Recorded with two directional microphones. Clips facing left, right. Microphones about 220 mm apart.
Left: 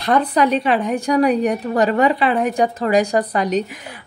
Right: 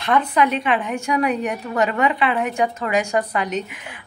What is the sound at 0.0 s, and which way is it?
A woman's voice, 35° left (ahead or behind).